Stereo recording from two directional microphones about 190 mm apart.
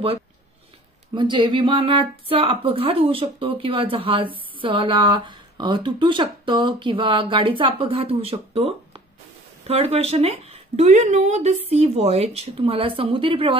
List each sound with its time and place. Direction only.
1.1 s speech: 25° right (ahead or behind)